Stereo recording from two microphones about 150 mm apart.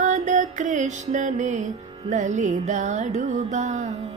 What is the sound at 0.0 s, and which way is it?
Music, 55° right (ahead or behind).